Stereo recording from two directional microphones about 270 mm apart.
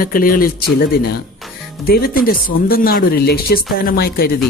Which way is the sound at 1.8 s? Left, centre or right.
Left.